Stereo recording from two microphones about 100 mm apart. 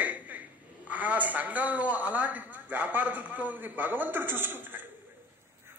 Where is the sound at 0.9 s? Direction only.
15° right (ahead or behind).